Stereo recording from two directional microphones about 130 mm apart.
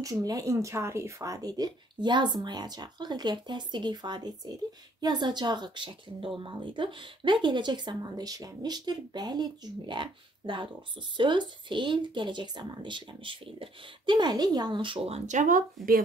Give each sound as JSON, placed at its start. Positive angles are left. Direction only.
{"t": 0.0, "sound": "a woman's voice", "side_deg": -25}